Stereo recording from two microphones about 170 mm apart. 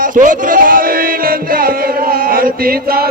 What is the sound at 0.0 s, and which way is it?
Music, 50° right (ahead or behind).